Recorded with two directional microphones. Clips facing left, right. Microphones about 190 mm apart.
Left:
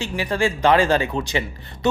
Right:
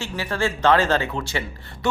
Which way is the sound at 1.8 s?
20° left (ahead or behind).